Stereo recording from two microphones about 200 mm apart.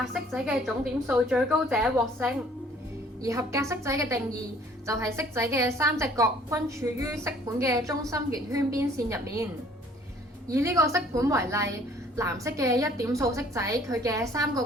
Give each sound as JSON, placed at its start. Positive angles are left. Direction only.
{"t": 0.0, "sound": "a woman's voice", "side_deg": 0}
{"t": 3.2, "sound": "a woman's voice", "side_deg": -15}
{"t": 10.5, "sound": "a woman's voice", "side_deg": -15}